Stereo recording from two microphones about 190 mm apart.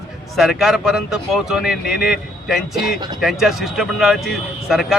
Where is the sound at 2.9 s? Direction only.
20° right (ahead or behind).